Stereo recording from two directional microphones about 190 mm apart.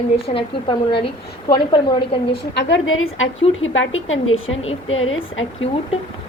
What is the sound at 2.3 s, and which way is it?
A woman's voice, 70° left (ahead or behind).